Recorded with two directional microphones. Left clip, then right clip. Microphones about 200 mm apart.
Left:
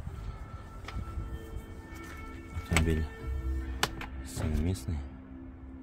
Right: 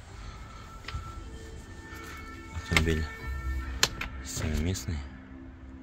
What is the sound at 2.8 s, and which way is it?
Music, 5° left (ahead or behind).